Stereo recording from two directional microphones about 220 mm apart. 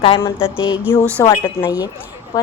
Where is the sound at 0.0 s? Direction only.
25° left (ahead or behind).